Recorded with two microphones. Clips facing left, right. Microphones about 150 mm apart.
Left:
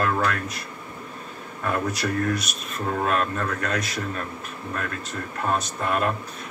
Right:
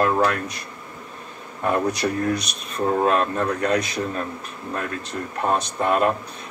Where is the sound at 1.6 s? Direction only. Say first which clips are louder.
Right 4 dB; 25° right (ahead or behind).